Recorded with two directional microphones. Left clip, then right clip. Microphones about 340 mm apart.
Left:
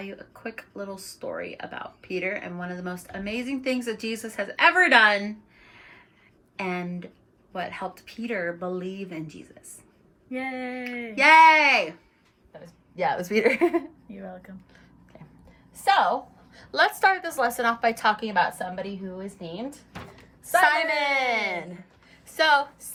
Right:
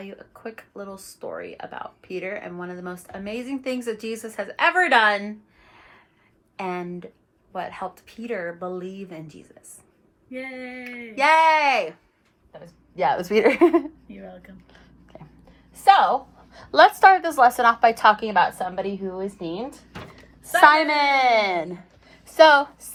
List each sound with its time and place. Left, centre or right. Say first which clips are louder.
0.0 s speech: even; centre
6.6 s speech: right 1 dB; centre
10.3 s a woman's voice: left 2 dB; centre
11.1 s a woman's voice: left 2 dB; centre
14.1 s speech: left 1 dB; centre
15.8 s a woman's voice: right 5 dB; centre
22.1 s a sound: right 7 dB; centre